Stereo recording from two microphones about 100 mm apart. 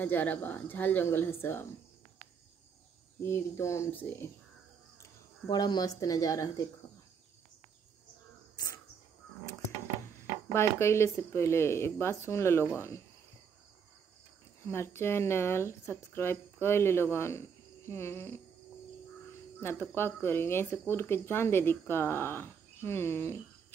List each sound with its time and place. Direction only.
0.0 s speech: 15° left (ahead or behind)
3.3 s speech: 25° left (ahead or behind)
5.5 s speech: 45° left (ahead or behind)
10.1 s speech: 25° left (ahead or behind)
14.6 s speech: 25° left (ahead or behind)
19.6 s speech: 25° left (ahead or behind)